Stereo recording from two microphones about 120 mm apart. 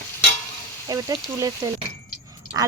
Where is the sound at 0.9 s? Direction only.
30° right (ahead or behind).